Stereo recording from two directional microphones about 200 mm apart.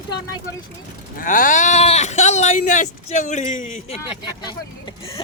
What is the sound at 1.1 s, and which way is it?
Speech, 40° left (ahead or behind).